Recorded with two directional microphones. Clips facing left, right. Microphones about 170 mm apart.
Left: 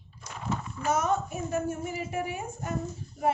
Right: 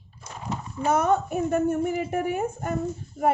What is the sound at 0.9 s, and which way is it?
A woman's voice, 55° right (ahead or behind).